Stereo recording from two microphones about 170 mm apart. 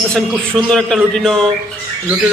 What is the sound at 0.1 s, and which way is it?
A man's voice, 5° left (ahead or behind).